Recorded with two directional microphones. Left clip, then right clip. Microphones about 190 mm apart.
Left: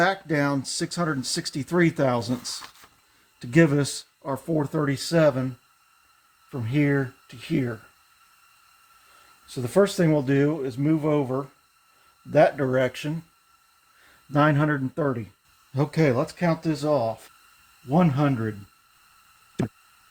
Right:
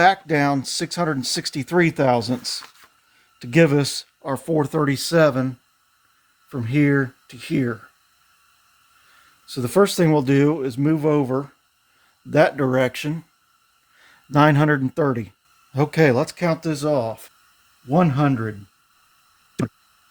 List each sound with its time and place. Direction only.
0.0 s speech: 45° right (ahead or behind)
4.2 s speech: 55° right (ahead or behind)
6.5 s speech: 60° right (ahead or behind)
9.6 s speech: 60° right (ahead or behind)
14.3 s speech: 65° right (ahead or behind)
15.7 s speech: 40° right (ahead or behind); by 18.4 s 60° right (ahead or behind)